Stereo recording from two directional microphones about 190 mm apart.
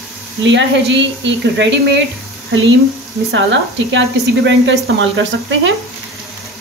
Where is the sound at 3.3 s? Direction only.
75° right (ahead or behind).